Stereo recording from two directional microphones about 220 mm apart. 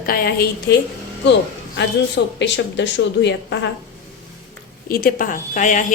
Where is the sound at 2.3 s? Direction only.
55° left (ahead or behind).